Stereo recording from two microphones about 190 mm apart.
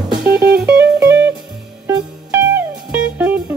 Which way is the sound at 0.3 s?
55° right (ahead or behind).